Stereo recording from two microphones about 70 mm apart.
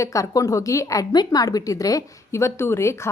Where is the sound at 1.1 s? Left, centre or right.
Left.